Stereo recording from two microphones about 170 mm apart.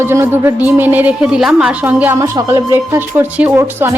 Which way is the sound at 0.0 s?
15° right (ahead or behind).